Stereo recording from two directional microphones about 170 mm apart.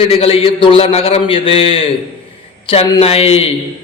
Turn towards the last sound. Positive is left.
turn(degrees=35)  # may be behind; listen again after turning